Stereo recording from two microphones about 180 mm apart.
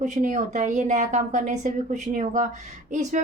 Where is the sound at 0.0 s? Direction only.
40° right (ahead or behind).